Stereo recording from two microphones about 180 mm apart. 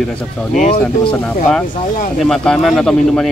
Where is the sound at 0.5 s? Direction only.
40° left (ahead or behind).